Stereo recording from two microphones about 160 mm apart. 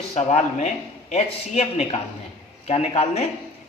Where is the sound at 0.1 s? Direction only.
40° left (ahead or behind).